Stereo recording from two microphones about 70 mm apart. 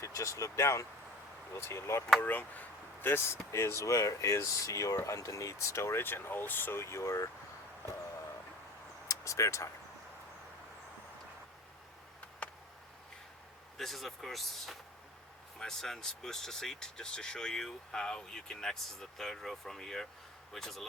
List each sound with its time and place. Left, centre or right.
0.0 s speech: left
2.2 s speech: left
9.0 s vehicle: left
13.7 s speech: centre